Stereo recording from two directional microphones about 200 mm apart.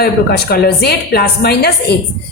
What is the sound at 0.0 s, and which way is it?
Speech, 55° left (ahead or behind).